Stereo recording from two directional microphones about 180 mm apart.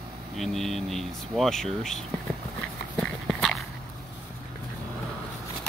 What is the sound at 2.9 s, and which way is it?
Dog, centre (ahead or behind).